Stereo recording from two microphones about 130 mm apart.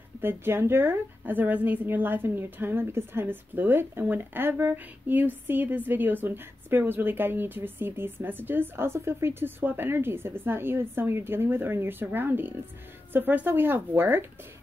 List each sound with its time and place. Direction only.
0.2 s a woman's voice: 15° right (ahead or behind)